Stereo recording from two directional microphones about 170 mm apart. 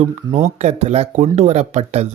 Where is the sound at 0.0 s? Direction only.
40° right (ahead or behind).